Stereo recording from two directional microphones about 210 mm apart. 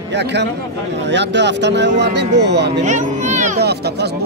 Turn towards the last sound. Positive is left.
turn(degrees=-50)  # may be behind; listen again after turning